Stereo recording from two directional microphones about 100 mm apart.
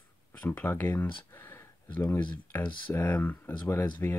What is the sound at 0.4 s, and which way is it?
Speech, 15° left (ahead or behind).